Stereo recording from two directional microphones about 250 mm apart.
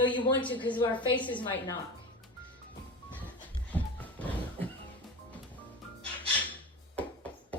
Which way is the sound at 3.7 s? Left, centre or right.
Centre.